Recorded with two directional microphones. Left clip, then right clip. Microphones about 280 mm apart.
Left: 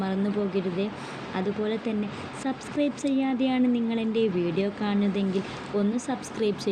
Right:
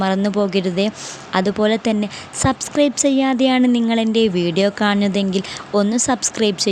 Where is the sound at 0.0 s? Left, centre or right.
Right.